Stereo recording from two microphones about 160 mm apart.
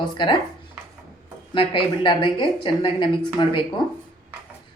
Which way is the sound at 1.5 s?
30° left (ahead or behind).